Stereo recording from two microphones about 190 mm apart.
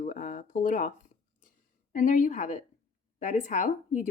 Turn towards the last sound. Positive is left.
turn(degrees=45)  # may be behind; listen again after turning